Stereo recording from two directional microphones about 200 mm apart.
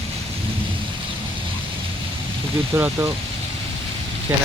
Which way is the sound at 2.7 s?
10° right (ahead or behind).